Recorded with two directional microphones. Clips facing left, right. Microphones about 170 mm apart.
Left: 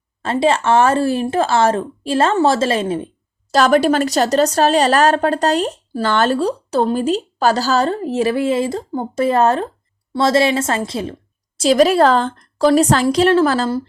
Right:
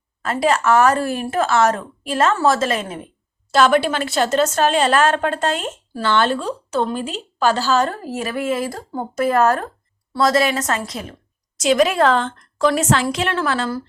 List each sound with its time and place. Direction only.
0.2 s speech: 25° left (ahead or behind)
3.5 s speech: 40° left (ahead or behind)